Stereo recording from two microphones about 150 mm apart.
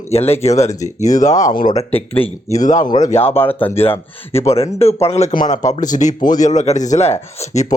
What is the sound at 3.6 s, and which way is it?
Speech, 15° left (ahead or behind).